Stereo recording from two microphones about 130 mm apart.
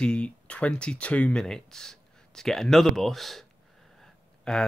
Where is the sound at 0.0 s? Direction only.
10° left (ahead or behind).